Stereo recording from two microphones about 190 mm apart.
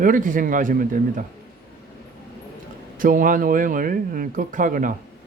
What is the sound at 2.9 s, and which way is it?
Speech, 45° right (ahead or behind).